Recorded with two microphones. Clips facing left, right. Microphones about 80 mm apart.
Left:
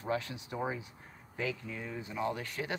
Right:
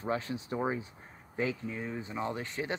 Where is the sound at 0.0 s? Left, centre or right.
Right.